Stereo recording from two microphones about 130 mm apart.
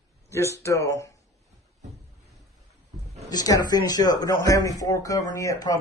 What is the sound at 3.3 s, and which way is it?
Speech, 30° left (ahead or behind).